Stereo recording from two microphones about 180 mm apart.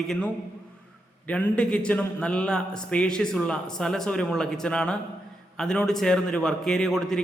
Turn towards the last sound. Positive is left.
turn(degrees=0)  # may be behind; listen again after turning